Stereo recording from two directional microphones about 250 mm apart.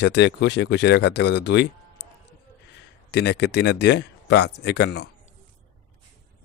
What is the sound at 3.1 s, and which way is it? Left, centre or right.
Speech, left.